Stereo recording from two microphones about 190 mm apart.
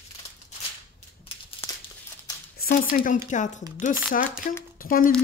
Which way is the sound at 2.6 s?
50° left (ahead or behind).